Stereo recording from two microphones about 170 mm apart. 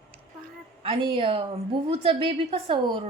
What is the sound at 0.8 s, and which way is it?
A woman's voice, 30° right (ahead or behind).